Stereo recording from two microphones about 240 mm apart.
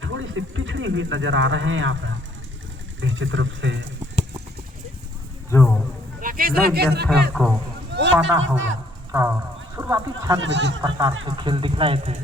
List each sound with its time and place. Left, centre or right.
0.0 s speech: right
5.5 s speech: centre
6.1 s a man's voice: right
7.4 s speech: centre
7.9 s speech: right
9.7 s speech: centre
10.4 s speech: right
10.8 s speech: centre